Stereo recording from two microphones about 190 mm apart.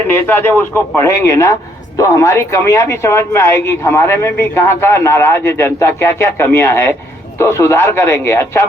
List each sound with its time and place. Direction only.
0.1 s speech: 10° left (ahead or behind)